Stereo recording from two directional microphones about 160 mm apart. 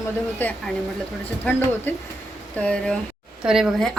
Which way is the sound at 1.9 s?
15° left (ahead or behind).